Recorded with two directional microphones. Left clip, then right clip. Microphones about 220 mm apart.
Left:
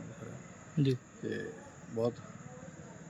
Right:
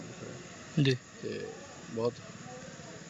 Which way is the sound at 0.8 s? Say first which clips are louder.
Right 3 dB; 5° left (ahead or behind).